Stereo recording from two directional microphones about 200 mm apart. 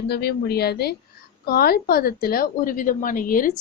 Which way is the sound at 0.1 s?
55° left (ahead or behind).